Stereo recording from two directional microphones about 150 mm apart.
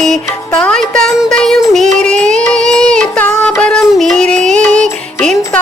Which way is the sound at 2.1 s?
55° right (ahead or behind).